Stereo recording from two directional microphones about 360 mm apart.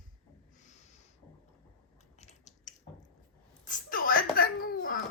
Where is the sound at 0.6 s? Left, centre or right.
Centre.